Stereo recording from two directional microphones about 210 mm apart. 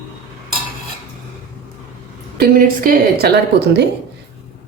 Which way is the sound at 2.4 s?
45° right (ahead or behind).